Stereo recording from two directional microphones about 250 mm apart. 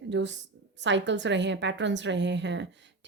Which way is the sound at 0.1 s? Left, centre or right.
Right.